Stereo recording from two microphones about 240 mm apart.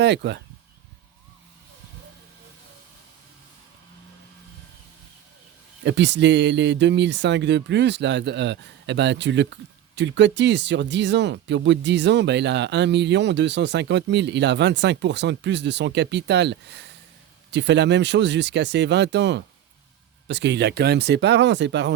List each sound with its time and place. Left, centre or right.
0.0 s speech: right
5.8 s speech: right